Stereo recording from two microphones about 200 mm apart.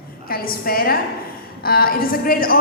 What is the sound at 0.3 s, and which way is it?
A woman's voice, 50° left (ahead or behind).